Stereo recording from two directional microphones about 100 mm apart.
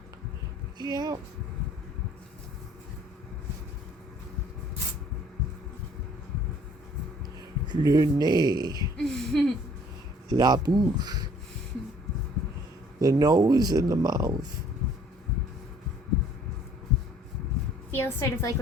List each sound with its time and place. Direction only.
0.8 s speech: 40° right (ahead or behind)
7.7 s speech: 40° right (ahead or behind)
9.0 s a sound: 5° left (ahead or behind)
10.2 s speech: 40° right (ahead or behind)
13.0 s speech: 35° right (ahead or behind)
17.9 s a woman's voice: 25° left (ahead or behind)